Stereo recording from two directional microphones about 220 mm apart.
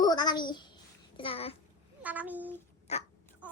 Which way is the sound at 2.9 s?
30° left (ahead or behind).